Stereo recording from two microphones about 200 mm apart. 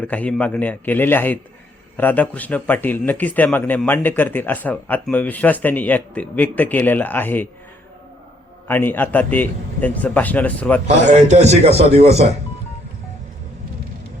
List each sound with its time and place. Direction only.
0.0 s a man's voice: 5° left (ahead or behind)
8.6 s a man's voice: 10° left (ahead or behind)
11.0 s a man's voice: 35° right (ahead or behind)